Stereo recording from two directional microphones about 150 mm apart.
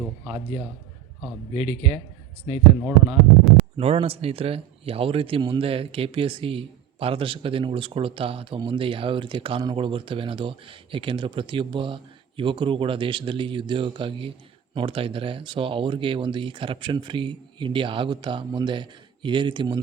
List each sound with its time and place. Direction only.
2.4 s speech: 10° right (ahead or behind)
3.8 s a man's voice: 40° right (ahead or behind)